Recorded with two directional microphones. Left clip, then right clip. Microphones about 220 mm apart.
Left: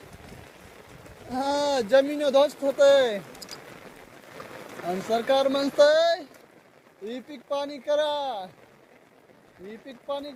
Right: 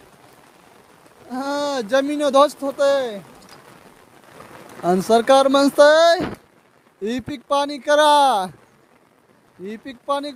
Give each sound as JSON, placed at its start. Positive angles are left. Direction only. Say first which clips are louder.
{"t": 1.3, "sound": "speech", "louder": "right 2 dB", "side_deg": -30}
{"t": 4.9, "sound": "speech", "louder": "right 10 dB", "side_deg": -45}
{"t": 9.6, "sound": "speech", "louder": "right 10 dB", "side_deg": -45}